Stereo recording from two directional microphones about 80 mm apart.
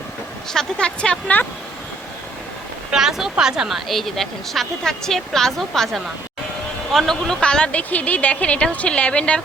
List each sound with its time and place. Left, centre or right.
0.5 s a woman's voice: centre
2.9 s a woman's voice: centre